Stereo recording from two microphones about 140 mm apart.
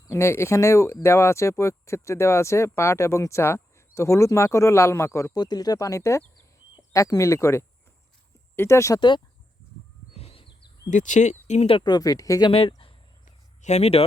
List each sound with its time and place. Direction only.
0.1 s speech: 20° left (ahead or behind)
9.0 s speech: 35° left (ahead or behind)
10.1 s chirp: 45° left (ahead or behind)
10.8 s speech: 65° left (ahead or behind); by 12.5 s 25° left (ahead or behind)
12.5 s speech: 40° left (ahead or behind)
13.6 s speech: 50° left (ahead or behind)